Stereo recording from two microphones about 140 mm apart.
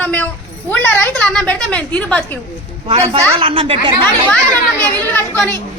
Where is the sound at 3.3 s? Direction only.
40° right (ahead or behind).